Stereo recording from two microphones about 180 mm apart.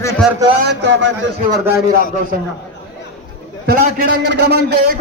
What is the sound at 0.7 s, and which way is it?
Speech, 80° right.